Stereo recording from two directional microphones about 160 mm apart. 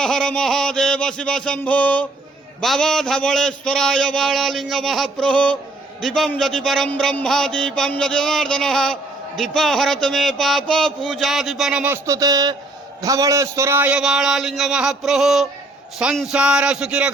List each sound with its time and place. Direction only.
0.0 s a man's voice: 5° left (ahead or behind)
12.0 s a man's voice: 20° right (ahead or behind); by 17.1 s 5° right (ahead or behind)